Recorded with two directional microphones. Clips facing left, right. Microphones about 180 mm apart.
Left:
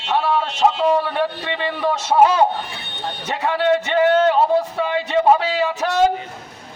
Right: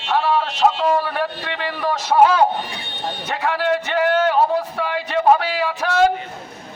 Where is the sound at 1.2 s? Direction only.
25° left (ahead or behind).